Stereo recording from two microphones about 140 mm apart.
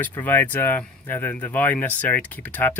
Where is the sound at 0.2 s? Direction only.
15° left (ahead or behind).